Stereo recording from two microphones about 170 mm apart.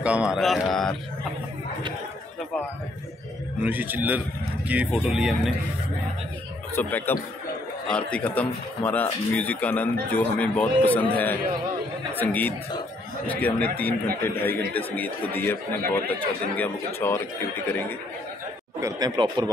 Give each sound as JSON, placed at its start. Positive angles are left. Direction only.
{"t": 0.0, "sound": "speech", "side_deg": -5}
{"t": 3.6, "sound": "a man's voice", "side_deg": -10}
{"t": 6.7, "sound": "speech", "side_deg": 10}
{"t": 18.8, "sound": "speech", "side_deg": -20}